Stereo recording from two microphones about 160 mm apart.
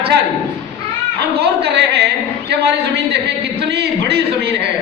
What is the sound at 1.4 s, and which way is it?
A man's voice, 90° right.